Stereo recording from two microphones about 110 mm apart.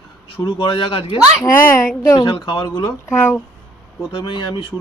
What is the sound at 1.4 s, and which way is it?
Speech, 25° left (ahead or behind).